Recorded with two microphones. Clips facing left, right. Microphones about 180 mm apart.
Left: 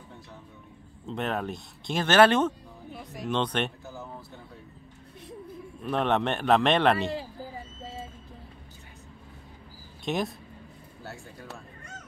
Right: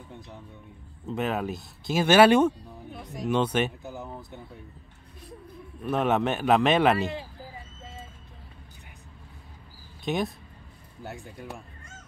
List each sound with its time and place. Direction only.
1.0 s speech: 5° right (ahead or behind)
2.9 s speech: centre (ahead or behind)
3.8 s a sound: 15° right (ahead or behind)
5.9 s speech: 5° right (ahead or behind)
10.0 s speech: centre (ahead or behind)
11.0 s speech: 15° right (ahead or behind)